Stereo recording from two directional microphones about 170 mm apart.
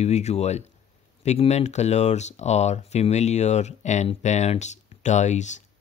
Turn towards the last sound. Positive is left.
turn(degrees=45)  # may be behind; listen again after turning